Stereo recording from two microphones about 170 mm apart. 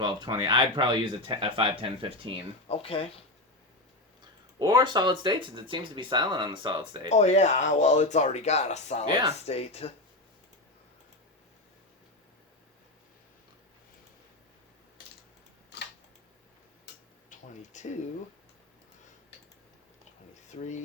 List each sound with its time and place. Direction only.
0.0 s speech: 30° right (ahead or behind)
2.6 s speech: 35° left (ahead or behind)
4.2 s speech: 30° right (ahead or behind)
7.1 s speech: 40° left (ahead or behind)
17.2 s a sound: 45° left (ahead or behind)
20.6 s speech: 45° left (ahead or behind)